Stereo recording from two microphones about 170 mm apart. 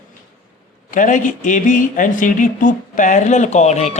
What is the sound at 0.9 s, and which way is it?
Speech, 50° left (ahead or behind).